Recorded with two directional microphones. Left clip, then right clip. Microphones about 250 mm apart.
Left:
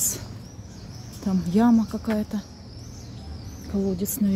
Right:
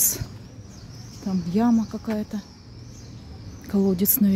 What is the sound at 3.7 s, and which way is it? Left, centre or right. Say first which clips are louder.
Speech: right 4 dB; centre.